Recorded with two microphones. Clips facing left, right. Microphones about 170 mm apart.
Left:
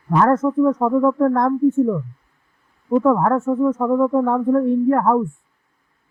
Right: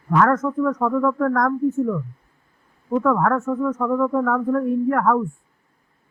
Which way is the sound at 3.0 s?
25° left (ahead or behind).